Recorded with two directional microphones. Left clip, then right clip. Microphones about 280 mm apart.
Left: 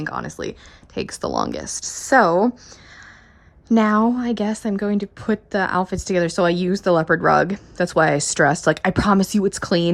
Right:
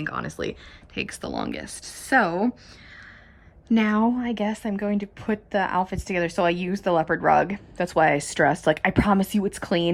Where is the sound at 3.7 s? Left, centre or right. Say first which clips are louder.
Left 5 dB; right.